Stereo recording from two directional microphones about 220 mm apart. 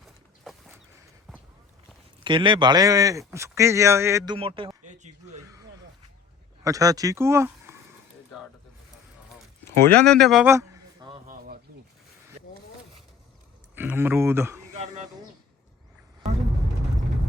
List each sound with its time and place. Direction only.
1.3 s walk: centre (ahead or behind)
2.2 s a man's voice: 20° right (ahead or behind)
4.4 s a man's voice: 25° right (ahead or behind)
6.7 s speech: 15° right (ahead or behind)
10.0 s speech: centre (ahead or behind)
10.4 s a sound: 15° right (ahead or behind)
11.3 s a sound: 40° right (ahead or behind)
13.7 s speech: 10° right (ahead or behind)
14.7 s a sound: 30° right (ahead or behind)